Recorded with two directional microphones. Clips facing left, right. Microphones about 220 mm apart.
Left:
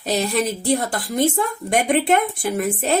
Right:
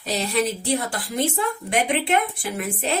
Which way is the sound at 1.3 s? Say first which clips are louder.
Left 3 dB; 45° left (ahead or behind).